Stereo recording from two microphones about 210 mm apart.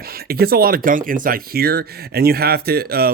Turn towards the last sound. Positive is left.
turn(degrees=-45)  # may be behind; listen again after turning